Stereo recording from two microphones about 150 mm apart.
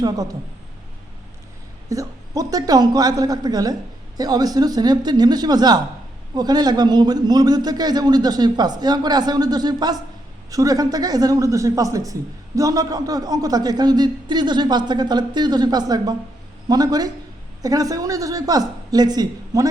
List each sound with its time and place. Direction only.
1.9 s a man's voice: 20° right (ahead or behind)